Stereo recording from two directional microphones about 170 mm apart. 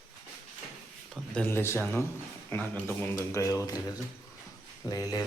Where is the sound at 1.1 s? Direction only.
10° left (ahead or behind).